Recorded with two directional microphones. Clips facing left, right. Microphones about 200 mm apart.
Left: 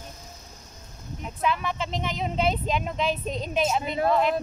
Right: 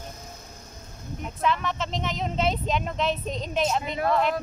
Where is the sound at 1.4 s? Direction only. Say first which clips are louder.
Even; 5° left (ahead or behind).